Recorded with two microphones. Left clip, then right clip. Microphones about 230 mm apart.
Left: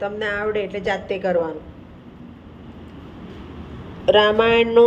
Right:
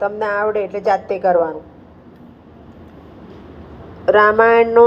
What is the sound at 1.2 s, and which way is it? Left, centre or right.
Speech, centre.